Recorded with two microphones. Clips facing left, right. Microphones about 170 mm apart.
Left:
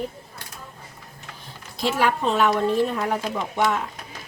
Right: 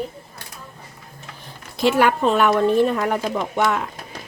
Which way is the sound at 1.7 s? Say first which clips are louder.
Right 5 dB; 60° right (ahead or behind).